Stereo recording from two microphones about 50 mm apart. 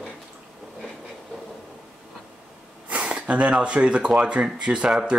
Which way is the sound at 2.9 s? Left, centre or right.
Right.